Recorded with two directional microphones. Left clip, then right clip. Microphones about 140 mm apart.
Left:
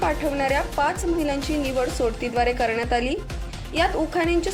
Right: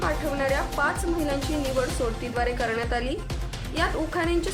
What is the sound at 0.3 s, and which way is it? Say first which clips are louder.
Speech: left 3 dB; 25° left (ahead or behind).